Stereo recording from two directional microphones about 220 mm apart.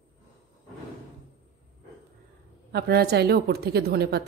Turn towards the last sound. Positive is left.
turn(degrees=-45)  # may be behind; listen again after turning